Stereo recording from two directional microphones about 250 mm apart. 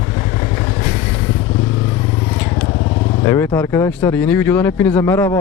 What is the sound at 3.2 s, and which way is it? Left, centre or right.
Speech, centre.